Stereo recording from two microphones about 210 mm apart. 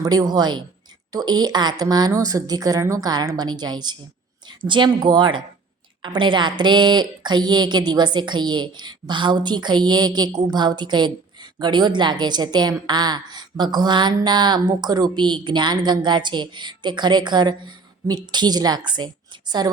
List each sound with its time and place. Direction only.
0.0 s a woman's voice: 20° right (ahead or behind)